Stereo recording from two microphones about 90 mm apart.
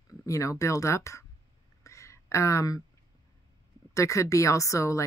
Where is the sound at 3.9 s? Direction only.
35° left (ahead or behind).